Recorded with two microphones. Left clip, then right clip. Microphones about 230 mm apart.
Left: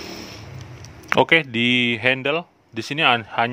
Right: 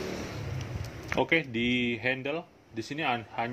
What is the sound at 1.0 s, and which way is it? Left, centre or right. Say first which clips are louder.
Speech: left 11 dB; left.